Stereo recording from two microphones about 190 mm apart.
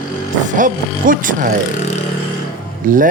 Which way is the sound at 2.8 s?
45° right (ahead or behind).